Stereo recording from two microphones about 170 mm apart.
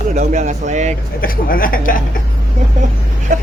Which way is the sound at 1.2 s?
55° left (ahead or behind).